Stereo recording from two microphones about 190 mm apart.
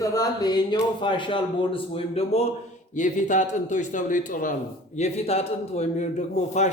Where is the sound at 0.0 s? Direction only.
20° left (ahead or behind).